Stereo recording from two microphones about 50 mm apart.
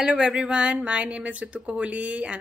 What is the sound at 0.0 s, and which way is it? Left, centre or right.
Speech, centre.